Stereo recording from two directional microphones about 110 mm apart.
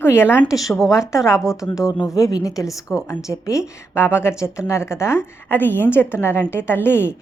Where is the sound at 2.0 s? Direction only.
30° left (ahead or behind).